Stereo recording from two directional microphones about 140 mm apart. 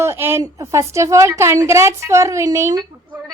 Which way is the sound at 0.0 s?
20° right (ahead or behind).